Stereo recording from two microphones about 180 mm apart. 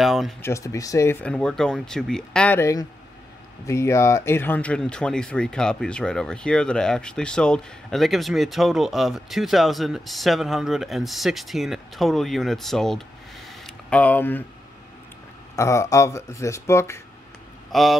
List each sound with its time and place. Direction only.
0.0 s speech: centre (ahead or behind)
0.4 s speech: 15° left (ahead or behind)
13.5 s a sound: 5° left (ahead or behind)
15.5 s speech: 15° left (ahead or behind)
17.6 s speech: centre (ahead or behind)